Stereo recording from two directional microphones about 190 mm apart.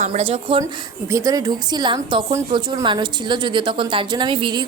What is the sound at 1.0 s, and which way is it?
A woman's voice, 15° right (ahead or behind).